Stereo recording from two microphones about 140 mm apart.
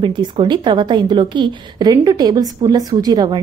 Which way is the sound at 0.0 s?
35° right (ahead or behind).